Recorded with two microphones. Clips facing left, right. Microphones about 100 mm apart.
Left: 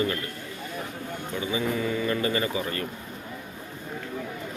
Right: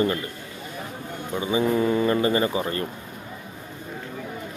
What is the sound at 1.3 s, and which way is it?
Speech, 30° right (ahead or behind).